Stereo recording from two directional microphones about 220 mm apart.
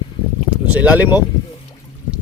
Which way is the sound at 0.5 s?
5° right (ahead or behind).